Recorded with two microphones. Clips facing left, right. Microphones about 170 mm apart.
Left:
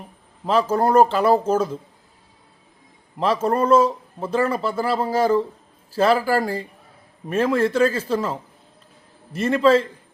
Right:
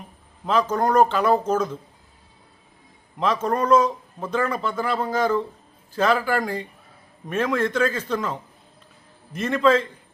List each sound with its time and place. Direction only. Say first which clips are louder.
0.4 s a man's voice: left 2 dB; 30° left (ahead or behind)
3.4 s a man's voice: left 2 dB; 30° left (ahead or behind)